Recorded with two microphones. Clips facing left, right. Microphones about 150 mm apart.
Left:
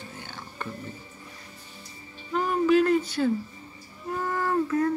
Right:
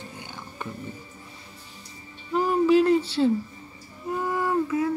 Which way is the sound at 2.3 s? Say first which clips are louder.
Right 3 dB; 25° right (ahead or behind).